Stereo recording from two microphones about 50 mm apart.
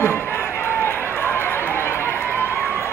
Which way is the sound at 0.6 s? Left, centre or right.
Left.